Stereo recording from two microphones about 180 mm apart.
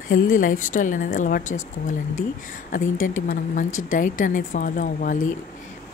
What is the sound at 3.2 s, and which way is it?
Speech, 45° left (ahead or behind).